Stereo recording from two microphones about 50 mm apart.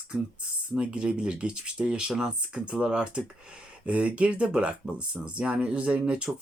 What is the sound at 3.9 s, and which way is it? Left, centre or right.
Speech, right.